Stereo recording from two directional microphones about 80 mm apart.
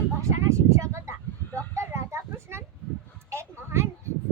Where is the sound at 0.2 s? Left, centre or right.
Right.